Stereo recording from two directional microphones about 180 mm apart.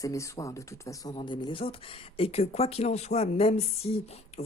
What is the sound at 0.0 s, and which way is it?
Speech, 20° left (ahead or behind).